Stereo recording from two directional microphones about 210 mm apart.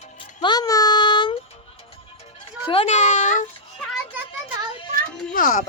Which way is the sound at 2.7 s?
30° left (ahead or behind).